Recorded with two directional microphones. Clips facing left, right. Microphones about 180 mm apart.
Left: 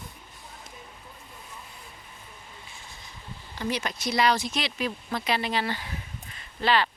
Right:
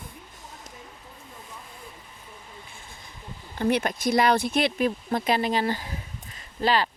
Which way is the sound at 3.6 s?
55° right (ahead or behind).